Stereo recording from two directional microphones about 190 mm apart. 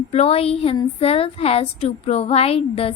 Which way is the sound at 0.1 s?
30° left (ahead or behind).